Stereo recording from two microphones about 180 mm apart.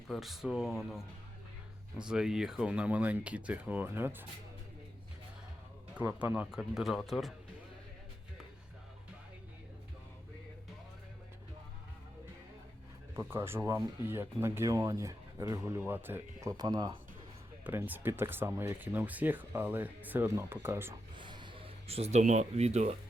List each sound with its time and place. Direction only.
0.1 s speech: centre (ahead or behind)
5.9 s speech: 10° right (ahead or behind)
13.1 s speech: 15° right (ahead or behind)
17.6 s speech: 10° right (ahead or behind)
21.2 s speech: 25° right (ahead or behind)